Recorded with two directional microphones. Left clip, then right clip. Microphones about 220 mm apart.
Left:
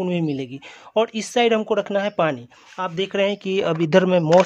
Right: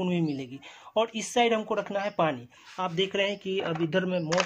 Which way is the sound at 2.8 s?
35° left (ahead or behind).